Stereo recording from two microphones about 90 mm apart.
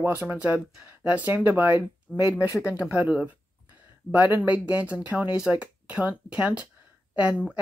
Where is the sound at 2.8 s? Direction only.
20° right (ahead or behind).